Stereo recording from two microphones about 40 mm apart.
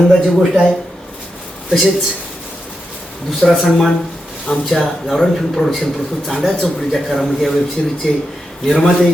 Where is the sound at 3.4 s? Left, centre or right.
Left.